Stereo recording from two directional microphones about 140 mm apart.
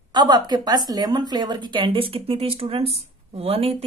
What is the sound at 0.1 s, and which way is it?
A woman's voice, 30° right (ahead or behind).